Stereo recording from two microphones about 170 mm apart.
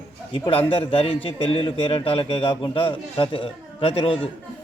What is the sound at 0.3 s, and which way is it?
A man's voice, 30° left (ahead or behind).